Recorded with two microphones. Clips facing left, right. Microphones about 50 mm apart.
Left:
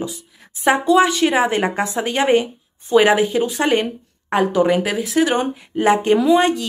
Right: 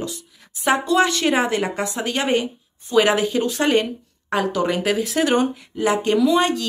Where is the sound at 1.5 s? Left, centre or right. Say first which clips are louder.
Left 3 dB; left.